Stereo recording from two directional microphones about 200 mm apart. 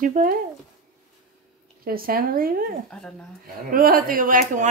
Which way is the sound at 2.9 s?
5° left (ahead or behind).